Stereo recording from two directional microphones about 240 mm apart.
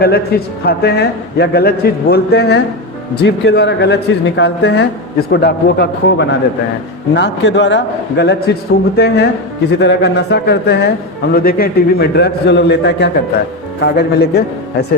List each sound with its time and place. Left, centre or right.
0.0 s a man's voice: left